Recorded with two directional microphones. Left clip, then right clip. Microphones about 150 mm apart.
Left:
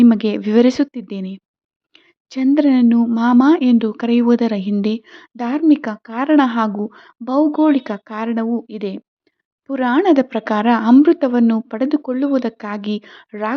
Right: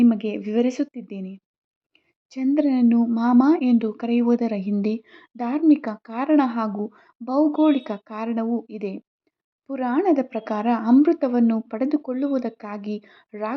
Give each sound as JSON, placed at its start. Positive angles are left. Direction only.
{"t": 0.0, "sound": "speech", "side_deg": 25}